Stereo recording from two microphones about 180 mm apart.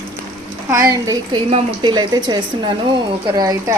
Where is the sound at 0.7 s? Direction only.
20° right (ahead or behind).